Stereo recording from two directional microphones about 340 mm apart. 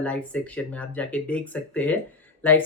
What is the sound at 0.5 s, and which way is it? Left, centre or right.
Speech, centre.